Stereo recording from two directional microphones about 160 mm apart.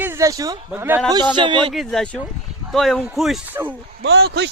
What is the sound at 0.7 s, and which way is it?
Speech, 10° right (ahead or behind).